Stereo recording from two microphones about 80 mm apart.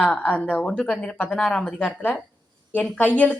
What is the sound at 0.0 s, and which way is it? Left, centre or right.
A woman's voice, centre.